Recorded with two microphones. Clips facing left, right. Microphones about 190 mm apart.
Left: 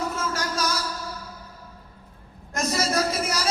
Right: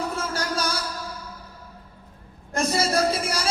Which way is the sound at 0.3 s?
30° right (ahead or behind).